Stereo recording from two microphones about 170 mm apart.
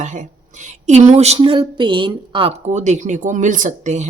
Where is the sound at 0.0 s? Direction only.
45° right (ahead or behind).